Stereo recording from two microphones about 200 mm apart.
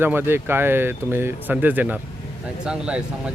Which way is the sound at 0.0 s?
10° right (ahead or behind).